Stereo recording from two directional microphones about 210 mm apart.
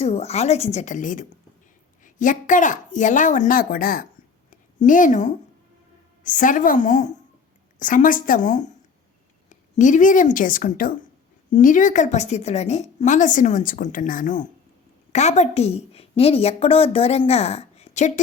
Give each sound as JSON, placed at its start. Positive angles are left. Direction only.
{"t": 0.0, "sound": "a woman's voice", "side_deg": 30}